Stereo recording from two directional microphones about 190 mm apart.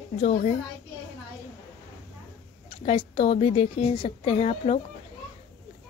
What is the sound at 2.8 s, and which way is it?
Speech, 30° left (ahead or behind).